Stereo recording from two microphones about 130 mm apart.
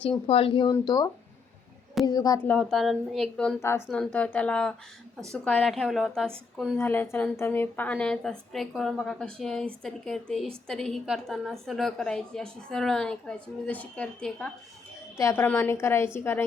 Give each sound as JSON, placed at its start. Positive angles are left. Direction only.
{"t": 0.3, "sound": "speech", "side_deg": 45}
{"t": 0.7, "sound": "a woman's voice", "side_deg": 30}
{"t": 2.4, "sound": "a woman's voice", "side_deg": 10}
{"t": 3.6, "sound": "a woman's voice", "side_deg": 20}
{"t": 3.9, "sound": "a woman's voice", "side_deg": 10}
{"t": 5.6, "sound": "a woman's voice", "side_deg": 0}
{"t": 6.7, "sound": "a woman's voice", "side_deg": 15}
{"t": 15.2, "sound": "a woman's voice", "side_deg": 20}